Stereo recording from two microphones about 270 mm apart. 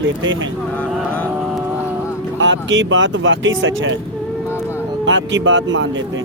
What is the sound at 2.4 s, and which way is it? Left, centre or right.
Speech, right.